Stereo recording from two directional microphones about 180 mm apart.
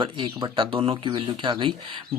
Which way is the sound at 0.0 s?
25° right (ahead or behind).